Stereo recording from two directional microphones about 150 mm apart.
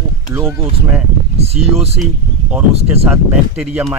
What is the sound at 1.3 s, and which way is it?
Speech, 45° right (ahead or behind).